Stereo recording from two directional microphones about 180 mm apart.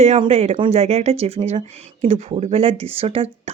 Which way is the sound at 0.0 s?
35° right (ahead or behind).